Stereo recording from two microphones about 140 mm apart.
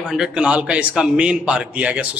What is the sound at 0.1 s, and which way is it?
A man's voice, 5° right (ahead or behind).